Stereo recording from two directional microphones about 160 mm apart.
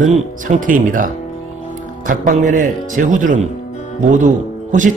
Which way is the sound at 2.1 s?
55° right (ahead or behind).